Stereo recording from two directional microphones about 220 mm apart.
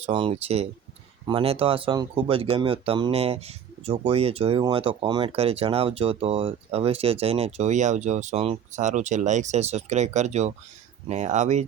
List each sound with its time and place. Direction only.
0.0 s speech: 25° right (ahead or behind)